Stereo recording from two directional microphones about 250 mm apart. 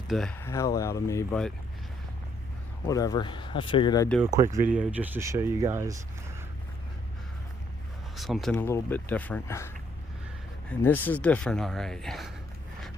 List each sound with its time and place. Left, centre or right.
0.1 s speech: centre
2.8 s speech: centre
4.7 s speech: centre
8.1 s speech: centre